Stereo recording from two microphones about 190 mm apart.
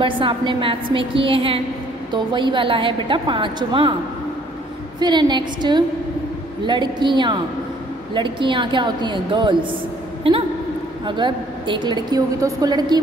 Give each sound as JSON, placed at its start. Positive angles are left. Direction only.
{"t": 0.0, "sound": "a woman's voice", "side_deg": -25}
{"t": 5.0, "sound": "a woman's voice", "side_deg": -25}